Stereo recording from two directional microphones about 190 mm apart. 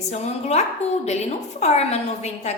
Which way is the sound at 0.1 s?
35° left (ahead or behind).